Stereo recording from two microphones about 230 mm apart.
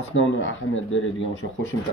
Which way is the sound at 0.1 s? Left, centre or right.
Left.